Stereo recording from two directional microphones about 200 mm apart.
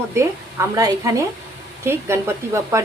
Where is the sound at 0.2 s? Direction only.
15° right (ahead or behind).